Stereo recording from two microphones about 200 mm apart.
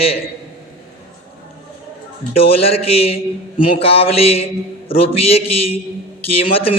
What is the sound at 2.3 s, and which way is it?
A man's voice, 30° left (ahead or behind).